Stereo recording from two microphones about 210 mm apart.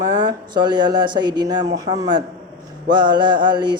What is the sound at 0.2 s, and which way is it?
A man's voice, 20° right (ahead or behind).